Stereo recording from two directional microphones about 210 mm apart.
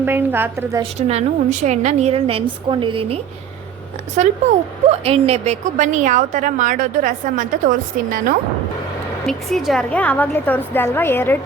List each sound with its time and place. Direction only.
0.0 s a woman's voice: 10° right (ahead or behind)
0.8 s a woman's voice: 30° right (ahead or behind)
4.2 s a woman's voice: 35° right (ahead or behind)
9.2 s a woman's voice: centre (ahead or behind)